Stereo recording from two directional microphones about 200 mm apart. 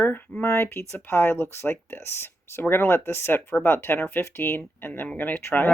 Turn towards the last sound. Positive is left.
turn(degrees=10)  # may be behind; listen again after turning